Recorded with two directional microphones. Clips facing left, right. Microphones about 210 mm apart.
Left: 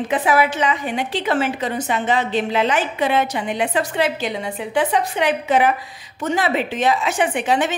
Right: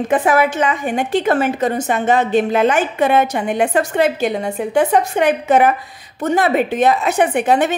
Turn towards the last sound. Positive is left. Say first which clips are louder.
# right 4 dB
turn(degrees=-55)  # may be behind; listen again after turning